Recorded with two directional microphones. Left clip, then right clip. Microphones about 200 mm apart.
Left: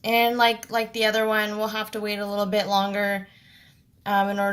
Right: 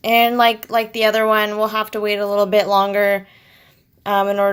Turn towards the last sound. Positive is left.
turn(degrees=-35)  # may be behind; listen again after turning